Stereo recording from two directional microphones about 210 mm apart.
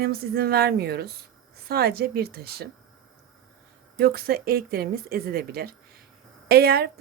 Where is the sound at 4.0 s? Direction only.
50° right (ahead or behind).